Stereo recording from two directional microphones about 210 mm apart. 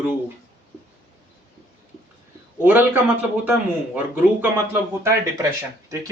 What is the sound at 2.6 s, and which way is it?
A man's voice, 10° right (ahead or behind).